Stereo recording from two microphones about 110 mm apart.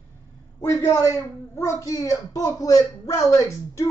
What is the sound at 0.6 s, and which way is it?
A man's voice, 25° left (ahead or behind).